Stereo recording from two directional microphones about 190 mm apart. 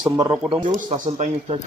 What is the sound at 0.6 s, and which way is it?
Speech, 40° right (ahead or behind).